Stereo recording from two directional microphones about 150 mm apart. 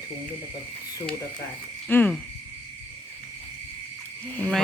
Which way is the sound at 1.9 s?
10° left (ahead or behind).